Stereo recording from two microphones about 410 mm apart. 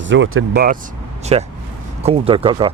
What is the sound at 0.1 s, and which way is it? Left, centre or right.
Speech, right.